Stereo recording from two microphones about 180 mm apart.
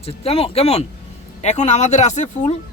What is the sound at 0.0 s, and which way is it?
Speech, 30° left (ahead or behind).